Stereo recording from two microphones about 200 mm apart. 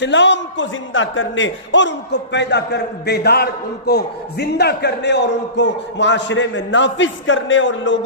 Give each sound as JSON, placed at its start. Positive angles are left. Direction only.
{"t": 0.0, "sound": "a man's voice", "side_deg": 60}